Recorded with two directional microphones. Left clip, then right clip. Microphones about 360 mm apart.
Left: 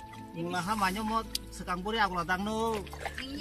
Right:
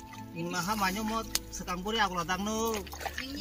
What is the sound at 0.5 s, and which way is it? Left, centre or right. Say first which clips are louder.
Speech: left 1 dB; centre.